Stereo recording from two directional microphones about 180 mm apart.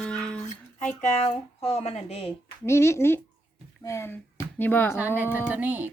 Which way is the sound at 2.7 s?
15° left (ahead or behind).